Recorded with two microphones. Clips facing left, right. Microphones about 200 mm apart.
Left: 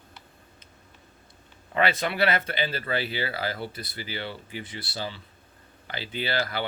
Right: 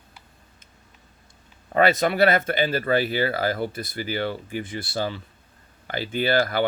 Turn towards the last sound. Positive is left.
turn(degrees=-50)  # may be behind; listen again after turning